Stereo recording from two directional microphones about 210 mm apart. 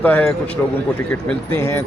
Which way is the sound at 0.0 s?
10° left (ahead or behind).